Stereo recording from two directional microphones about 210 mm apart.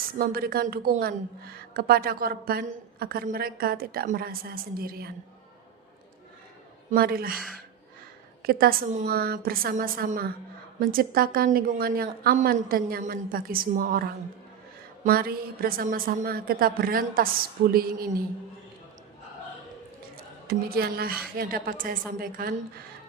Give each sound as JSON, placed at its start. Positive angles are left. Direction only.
{"t": 0.2, "sound": "a woman's voice", "side_deg": -45}
{"t": 6.9, "sound": "a woman's voice", "side_deg": -45}
{"t": 7.3, "sound": "speech", "side_deg": 0}
{"t": 8.4, "sound": "a woman's voice", "side_deg": -45}
{"t": 20.1, "sound": "a woman's voice", "side_deg": -45}